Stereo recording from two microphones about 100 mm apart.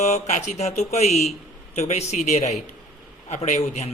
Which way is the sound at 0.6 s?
90° left.